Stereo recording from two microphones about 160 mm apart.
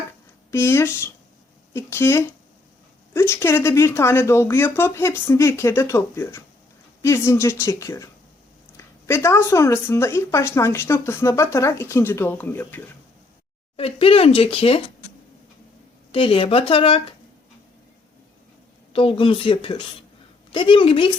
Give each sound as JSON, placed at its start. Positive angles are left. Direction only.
{"t": 0.5, "sound": "speech", "side_deg": 15}
{"t": 13.7, "sound": "speech", "side_deg": 35}
{"t": 16.1, "sound": "speech", "side_deg": 35}
{"t": 18.9, "sound": "speech", "side_deg": 35}